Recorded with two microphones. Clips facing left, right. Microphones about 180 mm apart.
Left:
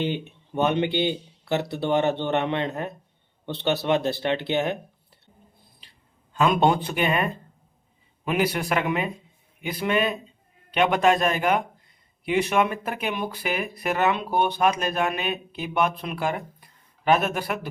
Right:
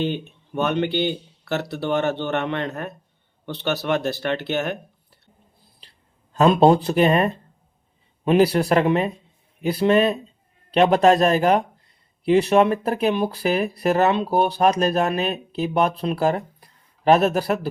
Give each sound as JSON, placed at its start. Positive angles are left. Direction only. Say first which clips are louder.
{"t": 0.0, "sound": "speech", "louder": "right 2 dB", "side_deg": 15}
{"t": 6.3, "sound": "speech", "louder": "right 6 dB", "side_deg": -35}